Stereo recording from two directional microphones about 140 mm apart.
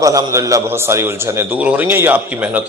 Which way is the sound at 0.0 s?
25° right (ahead or behind).